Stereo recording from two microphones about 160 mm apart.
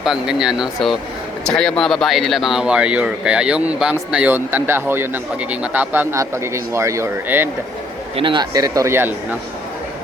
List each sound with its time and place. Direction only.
0.0 s speech: 5° right (ahead or behind)
8.1 s a man's voice: 30° right (ahead or behind); by 9.4 s 15° right (ahead or behind)